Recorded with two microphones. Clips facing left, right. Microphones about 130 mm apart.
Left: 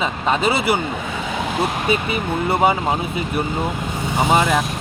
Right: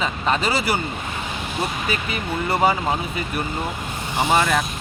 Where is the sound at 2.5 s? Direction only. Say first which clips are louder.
Left 2 dB; 20° left (ahead or behind).